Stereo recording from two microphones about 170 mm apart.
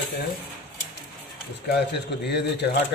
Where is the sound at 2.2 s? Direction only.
75° left (ahead or behind).